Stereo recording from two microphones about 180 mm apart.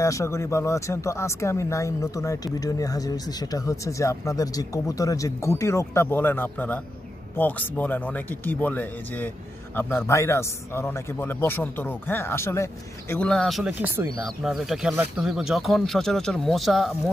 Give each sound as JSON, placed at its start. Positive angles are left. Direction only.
{"t": 0.0, "sound": "speech", "side_deg": 15}
{"t": 14.2, "sound": "speech", "side_deg": 0}